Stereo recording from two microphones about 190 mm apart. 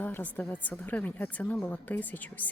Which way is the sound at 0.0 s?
10° left (ahead or behind).